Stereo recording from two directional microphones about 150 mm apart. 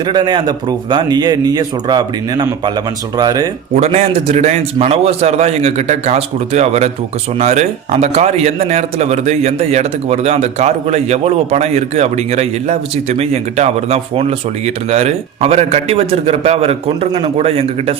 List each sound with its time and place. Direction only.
0.0 s a man's voice: 30° right (ahead or behind)
3.8 s a man's voice: 45° right (ahead or behind)